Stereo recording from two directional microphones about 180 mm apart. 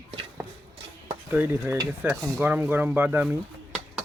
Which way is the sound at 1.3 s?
10° right (ahead or behind).